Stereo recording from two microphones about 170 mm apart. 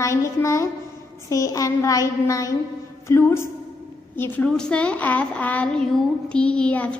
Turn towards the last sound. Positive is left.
turn(degrees=5)  # may be behind; listen again after turning